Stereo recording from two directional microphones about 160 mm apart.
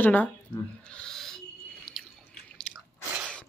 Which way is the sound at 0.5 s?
30° left (ahead or behind).